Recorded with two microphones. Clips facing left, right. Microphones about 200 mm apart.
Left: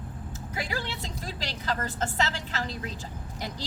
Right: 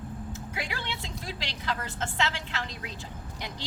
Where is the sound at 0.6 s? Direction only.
40° left (ahead or behind).